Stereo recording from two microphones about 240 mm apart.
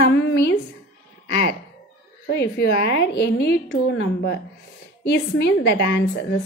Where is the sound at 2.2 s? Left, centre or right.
Left.